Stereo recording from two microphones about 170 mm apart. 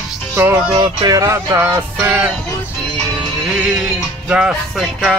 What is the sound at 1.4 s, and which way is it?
Music, 15° right (ahead or behind).